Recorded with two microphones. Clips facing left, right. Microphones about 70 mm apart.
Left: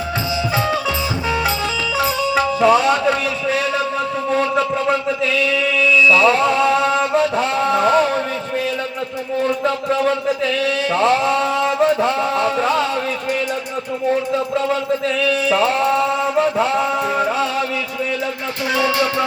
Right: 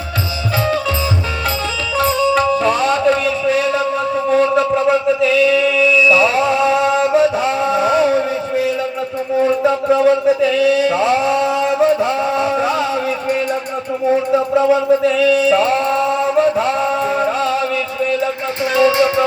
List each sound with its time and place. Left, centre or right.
2.0 s music: centre
2.6 s a sound: centre
4.3 s chant: centre
9.6 s speech: centre
10.8 s a sound: centre
14.3 s chant: centre
18.8 s music: right